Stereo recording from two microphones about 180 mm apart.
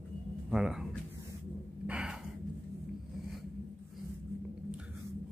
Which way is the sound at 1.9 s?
5° right (ahead or behind).